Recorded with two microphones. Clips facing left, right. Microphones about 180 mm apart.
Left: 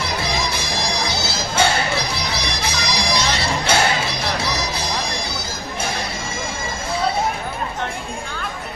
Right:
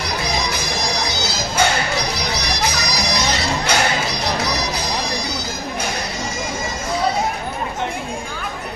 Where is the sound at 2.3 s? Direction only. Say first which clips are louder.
Right 2 dB; 30° left (ahead or behind).